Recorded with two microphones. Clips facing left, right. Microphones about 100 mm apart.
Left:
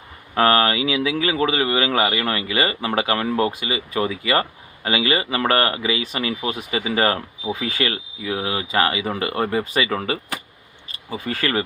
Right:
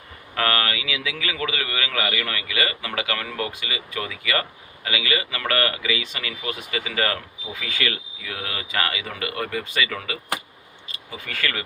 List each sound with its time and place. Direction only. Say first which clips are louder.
0.3 s speech: left 7 dB; 30° left (ahead or behind)